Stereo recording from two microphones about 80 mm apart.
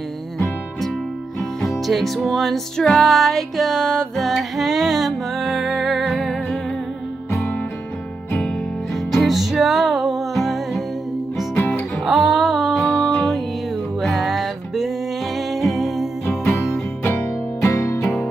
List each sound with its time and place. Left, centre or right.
1.6 s music: centre
4.3 s music: centre
9.1 s music: centre
11.5 s music: left
12.0 s music: centre
17.0 s music: left
17.6 s music: left